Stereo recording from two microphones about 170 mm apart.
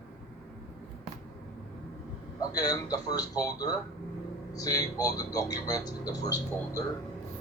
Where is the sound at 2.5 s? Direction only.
20° left (ahead or behind).